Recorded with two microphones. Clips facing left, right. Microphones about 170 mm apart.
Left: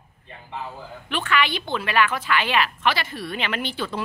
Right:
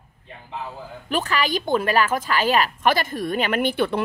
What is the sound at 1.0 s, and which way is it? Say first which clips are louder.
A woman's voice: right 1 dB; 40° right (ahead or behind).